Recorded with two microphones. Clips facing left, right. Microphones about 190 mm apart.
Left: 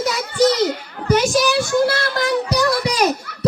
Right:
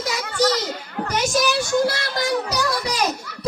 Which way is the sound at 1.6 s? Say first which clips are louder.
Left 3 dB; 55° left (ahead or behind).